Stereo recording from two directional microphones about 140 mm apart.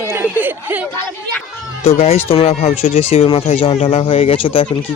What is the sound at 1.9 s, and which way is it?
Speech, 50° left (ahead or behind).